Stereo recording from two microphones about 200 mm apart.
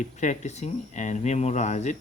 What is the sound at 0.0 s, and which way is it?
Speech, 35° left (ahead or behind).